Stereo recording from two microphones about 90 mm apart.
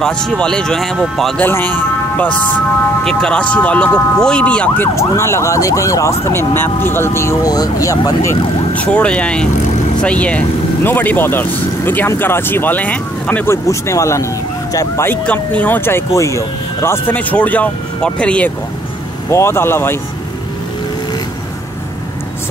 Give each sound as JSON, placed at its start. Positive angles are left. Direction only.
{"t": 0.0, "sound": "speech", "side_deg": 10}
{"t": 1.4, "sound": "a man's voice", "side_deg": 20}
{"t": 3.0, "sound": "speech", "side_deg": 5}
{"t": 4.9, "sound": "speech", "side_deg": 30}
{"t": 7.4, "sound": "speech", "side_deg": 45}
{"t": 8.7, "sound": "speech", "side_deg": 15}
{"t": 13.5, "sound": "speech", "side_deg": 35}
{"t": 15.0, "sound": "speech", "side_deg": 15}
{"t": 17.1, "sound": "speech", "side_deg": 15}
{"t": 19.3, "sound": "speech", "side_deg": 30}